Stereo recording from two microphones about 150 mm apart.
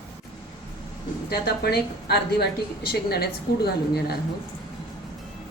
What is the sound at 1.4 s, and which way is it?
A woman's voice, 90° left.